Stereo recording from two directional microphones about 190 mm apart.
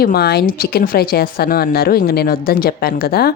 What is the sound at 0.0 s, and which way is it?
Speech, 55° left (ahead or behind).